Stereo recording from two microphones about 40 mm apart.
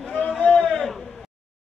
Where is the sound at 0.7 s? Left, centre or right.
Centre.